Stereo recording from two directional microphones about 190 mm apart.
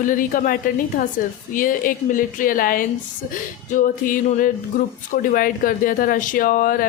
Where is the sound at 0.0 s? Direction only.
45° left (ahead or behind).